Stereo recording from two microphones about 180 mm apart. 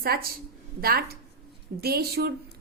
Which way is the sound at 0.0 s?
55° right (ahead or behind).